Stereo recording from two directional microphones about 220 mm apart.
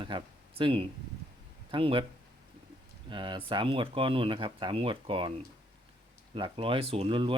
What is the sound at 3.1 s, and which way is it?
Speech, 20° right (ahead or behind).